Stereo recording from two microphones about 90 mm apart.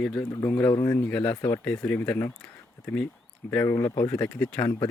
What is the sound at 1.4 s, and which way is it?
Speech, 40° left (ahead or behind).